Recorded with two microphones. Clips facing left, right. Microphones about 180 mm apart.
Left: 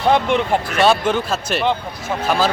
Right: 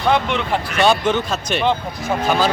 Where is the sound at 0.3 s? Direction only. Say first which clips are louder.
Left 4 dB; 45° left (ahead or behind).